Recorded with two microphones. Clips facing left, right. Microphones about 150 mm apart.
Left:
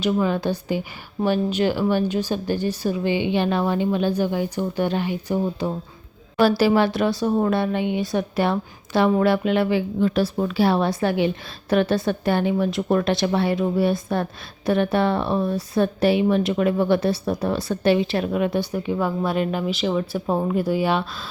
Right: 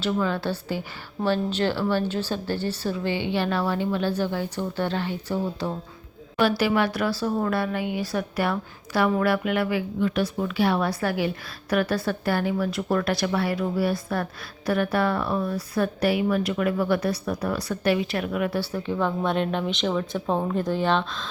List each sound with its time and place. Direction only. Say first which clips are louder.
0.0 s speech: left 4 dB; 15° left (ahead or behind)
6.4 s a woman's voice: left 4 dB; 30° left (ahead or behind); by 21.2 s 10° left (ahead or behind)